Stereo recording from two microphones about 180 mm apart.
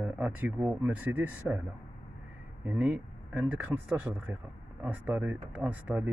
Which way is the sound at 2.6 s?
10° right (ahead or behind).